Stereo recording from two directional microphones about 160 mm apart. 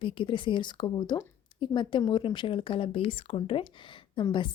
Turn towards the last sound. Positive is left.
turn(degrees=30)  # may be behind; listen again after turning